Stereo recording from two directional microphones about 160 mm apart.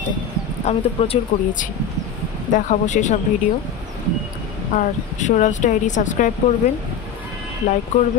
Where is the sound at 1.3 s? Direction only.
55° left (ahead or behind).